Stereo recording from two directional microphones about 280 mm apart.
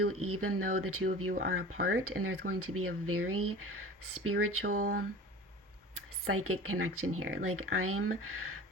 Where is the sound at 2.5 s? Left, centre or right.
Right.